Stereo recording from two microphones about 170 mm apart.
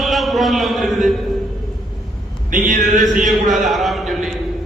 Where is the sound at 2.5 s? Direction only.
50° right (ahead or behind).